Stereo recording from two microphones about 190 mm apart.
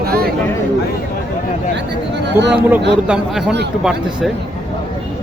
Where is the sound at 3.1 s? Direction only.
5° right (ahead or behind).